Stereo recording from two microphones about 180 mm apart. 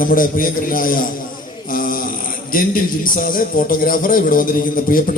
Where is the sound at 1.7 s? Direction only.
50° left (ahead or behind).